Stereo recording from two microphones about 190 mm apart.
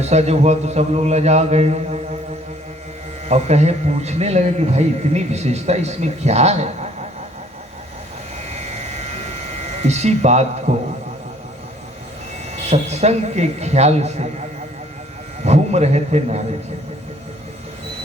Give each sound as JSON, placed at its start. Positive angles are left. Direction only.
{"t": 0.0, "sound": "speech", "side_deg": -35}
{"t": 3.2, "sound": "speech", "side_deg": -35}
{"t": 9.8, "sound": "speech", "side_deg": -35}
{"t": 12.7, "sound": "speech", "side_deg": -35}
{"t": 15.4, "sound": "speech", "side_deg": -35}